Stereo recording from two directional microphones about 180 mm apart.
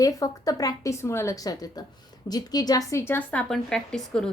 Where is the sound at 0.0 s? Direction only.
20° left (ahead or behind).